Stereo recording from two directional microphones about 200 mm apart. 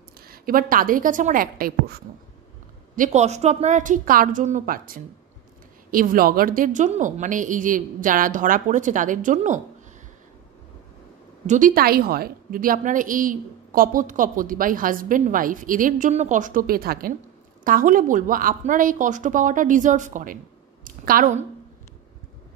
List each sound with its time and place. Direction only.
0.3 s a woman's voice: 45° right (ahead or behind)
3.0 s a woman's voice: 35° right (ahead or behind)
11.4 s a woman's voice: 40° right (ahead or behind)